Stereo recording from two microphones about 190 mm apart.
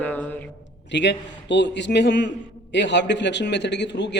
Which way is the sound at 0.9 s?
70° left (ahead or behind).